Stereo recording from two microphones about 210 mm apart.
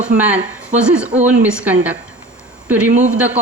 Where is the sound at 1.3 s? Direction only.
5° right (ahead or behind).